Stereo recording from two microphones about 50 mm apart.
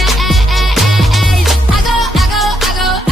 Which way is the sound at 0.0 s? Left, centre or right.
Centre.